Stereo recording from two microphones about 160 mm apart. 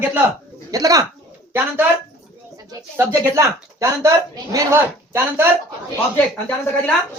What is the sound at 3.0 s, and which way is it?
Speech, 20° right (ahead or behind).